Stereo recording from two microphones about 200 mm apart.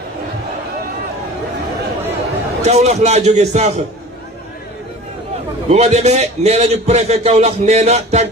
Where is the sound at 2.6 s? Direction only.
35° right (ahead or behind).